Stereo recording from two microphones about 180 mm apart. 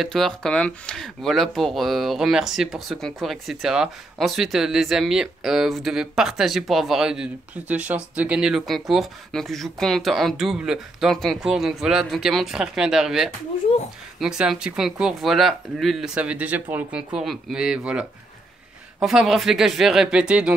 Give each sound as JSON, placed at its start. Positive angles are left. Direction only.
{"t": 0.0, "sound": "speech", "side_deg": 0}
{"t": 13.7, "sound": "speech", "side_deg": 30}
{"t": 14.2, "sound": "speech", "side_deg": -5}